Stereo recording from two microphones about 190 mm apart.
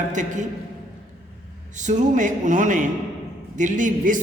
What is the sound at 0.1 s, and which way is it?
Speech, 40° right (ahead or behind).